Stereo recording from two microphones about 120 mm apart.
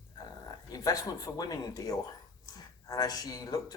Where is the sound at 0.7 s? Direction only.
30° left (ahead or behind).